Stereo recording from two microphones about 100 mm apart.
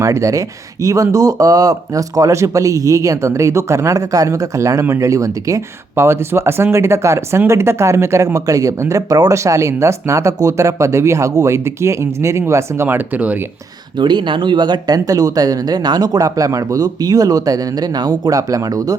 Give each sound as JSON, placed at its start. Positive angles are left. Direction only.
{"t": 0.0, "sound": "speech", "side_deg": -30}
{"t": 14.0, "sound": "speech", "side_deg": -50}